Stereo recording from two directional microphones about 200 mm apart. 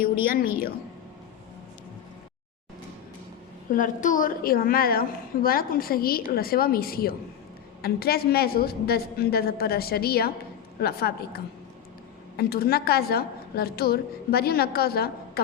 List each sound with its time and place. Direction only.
0.0 s a woman's voice: 45° left (ahead or behind)
3.7 s a woman's voice: 40° left (ahead or behind)